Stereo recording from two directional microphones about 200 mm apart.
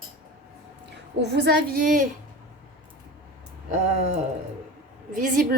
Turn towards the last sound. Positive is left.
turn(degrees=-40)  # may be behind; listen again after turning